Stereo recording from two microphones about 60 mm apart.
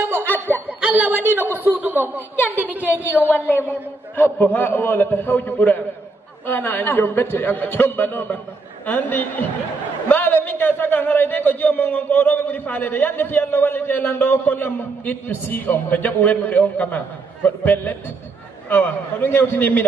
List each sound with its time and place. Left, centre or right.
0.7 s a sound: right
1.2 s a man's voice: right
3.3 s a man's voice: left